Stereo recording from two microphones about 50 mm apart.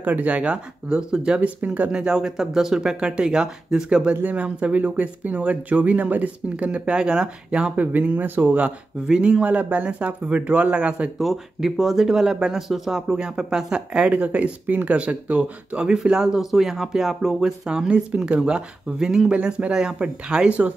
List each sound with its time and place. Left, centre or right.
0.0 s speech: right; by 1.4 s centre
1.4 s speech: right
1.9 s speech: centre
4.1 s speech: right
7.0 s speech: centre
7.8 s speech: right
9.0 s speech: centre
11.1 s speech: centre
17.4 s speech: centre
19.3 s speech: right
19.7 s speech: centre